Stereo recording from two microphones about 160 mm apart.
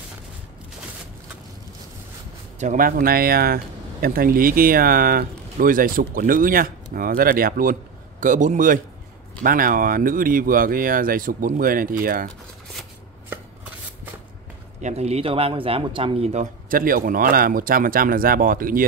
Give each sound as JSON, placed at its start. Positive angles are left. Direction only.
{"t": 2.6, "sound": "speech", "side_deg": -55}
{"t": 8.2, "sound": "speech", "side_deg": -50}
{"t": 14.8, "sound": "a man's voice", "side_deg": -45}
{"t": 16.6, "sound": "speech", "side_deg": -60}